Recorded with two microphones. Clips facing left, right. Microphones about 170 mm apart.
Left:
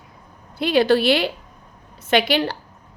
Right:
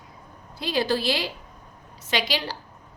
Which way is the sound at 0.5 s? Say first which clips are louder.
Left 8 dB; 65° left (ahead or behind).